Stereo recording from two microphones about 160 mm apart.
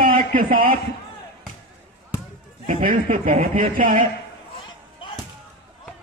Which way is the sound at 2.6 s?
50° right (ahead or behind).